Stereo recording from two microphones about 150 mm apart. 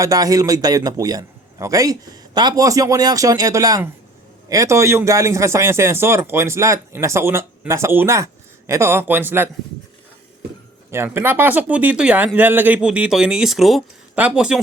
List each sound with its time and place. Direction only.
0.0 s a man's voice: 25° right (ahead or behind)
10.9 s speech: 15° right (ahead or behind)